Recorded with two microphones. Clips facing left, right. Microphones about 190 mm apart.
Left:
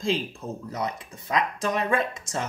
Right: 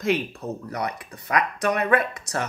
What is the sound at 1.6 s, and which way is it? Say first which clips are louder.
Speech: right 6 dB; 65° right (ahead or behind).